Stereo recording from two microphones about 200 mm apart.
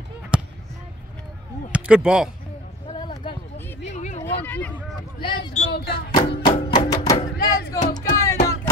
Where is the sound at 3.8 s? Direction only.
35° left (ahead or behind).